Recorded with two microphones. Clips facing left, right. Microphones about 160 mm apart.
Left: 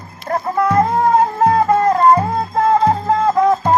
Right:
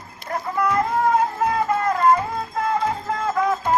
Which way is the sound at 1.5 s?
40° left (ahead or behind).